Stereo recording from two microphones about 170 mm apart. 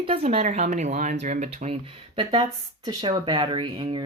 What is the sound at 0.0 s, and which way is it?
Speech, 35° right (ahead or behind).